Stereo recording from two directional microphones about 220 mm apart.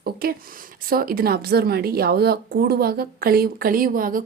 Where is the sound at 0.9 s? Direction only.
40° right (ahead or behind).